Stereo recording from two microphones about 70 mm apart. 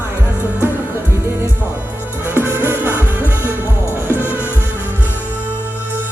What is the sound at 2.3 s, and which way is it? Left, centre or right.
Music, right.